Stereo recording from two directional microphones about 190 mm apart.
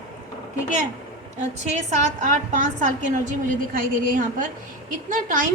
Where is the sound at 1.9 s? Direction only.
40° right (ahead or behind).